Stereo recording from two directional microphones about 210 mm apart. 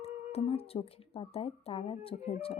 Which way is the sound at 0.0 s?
30° left (ahead or behind).